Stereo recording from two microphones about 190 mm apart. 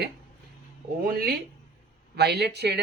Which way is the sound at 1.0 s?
50° right (ahead or behind).